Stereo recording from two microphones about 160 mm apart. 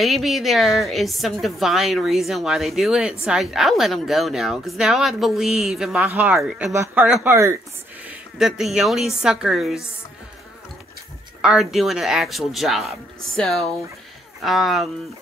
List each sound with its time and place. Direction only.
0.0 s a woman's voice: centre (ahead or behind)
6.7 s speech: 15° right (ahead or behind)
8.0 s a woman's voice: 5° right (ahead or behind)
11.4 s a woman's voice: centre (ahead or behind)